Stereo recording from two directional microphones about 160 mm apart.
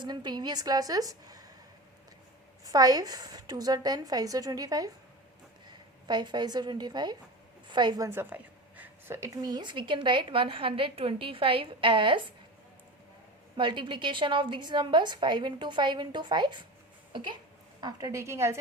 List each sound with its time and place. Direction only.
0.0 s a woman's voice: 25° right (ahead or behind)
2.6 s a woman's voice: 25° right (ahead or behind)
6.1 s a woman's voice: 25° right (ahead or behind)
13.6 s a woman's voice: 30° right (ahead or behind)